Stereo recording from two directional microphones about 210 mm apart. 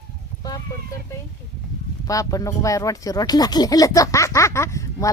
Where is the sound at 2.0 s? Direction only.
15° left (ahead or behind).